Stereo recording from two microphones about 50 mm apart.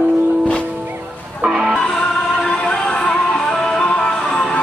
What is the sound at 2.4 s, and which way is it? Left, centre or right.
Music, centre.